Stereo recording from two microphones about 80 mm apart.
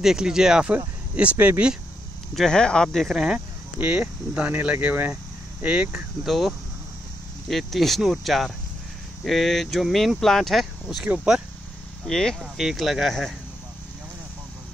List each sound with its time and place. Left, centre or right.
0.0 s speech: centre
2.3 s speech: centre
3.3 s speech: right
5.1 s cricket: centre
6.2 s speech: centre
12.1 s speech: centre
12.4 s speech: centre